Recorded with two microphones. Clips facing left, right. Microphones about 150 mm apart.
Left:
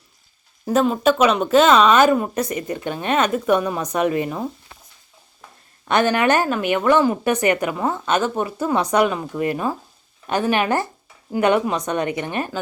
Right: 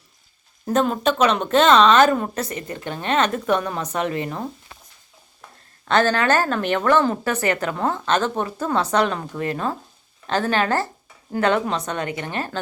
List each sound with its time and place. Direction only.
0.6 s speech: 5° left (ahead or behind)
5.9 s speech: 15° left (ahead or behind)